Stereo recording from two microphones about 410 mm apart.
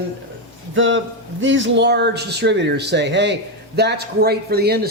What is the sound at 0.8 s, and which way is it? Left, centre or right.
Speech, right.